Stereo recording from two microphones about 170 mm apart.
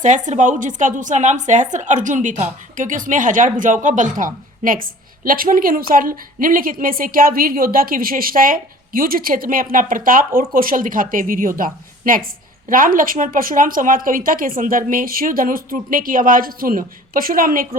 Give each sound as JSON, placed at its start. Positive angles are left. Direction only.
{"t": 0.0, "sound": "a woman's voice", "side_deg": -45}